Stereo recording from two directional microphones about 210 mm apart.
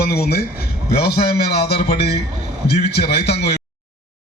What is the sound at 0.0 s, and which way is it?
A man's voice, 50° left (ahead or behind).